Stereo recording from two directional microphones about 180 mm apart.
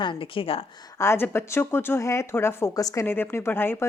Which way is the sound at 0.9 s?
15° left (ahead or behind).